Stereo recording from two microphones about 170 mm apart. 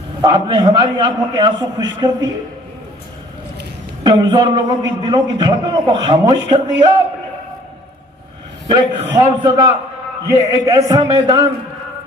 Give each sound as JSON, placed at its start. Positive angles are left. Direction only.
{"t": 0.2, "sound": "a man's voice", "side_deg": -25}
{"t": 4.0, "sound": "a man's voice", "side_deg": -25}
{"t": 8.7, "sound": "a man's voice", "side_deg": -25}